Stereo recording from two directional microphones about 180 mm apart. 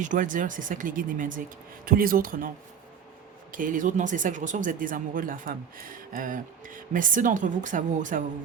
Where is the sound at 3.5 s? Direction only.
45° right (ahead or behind).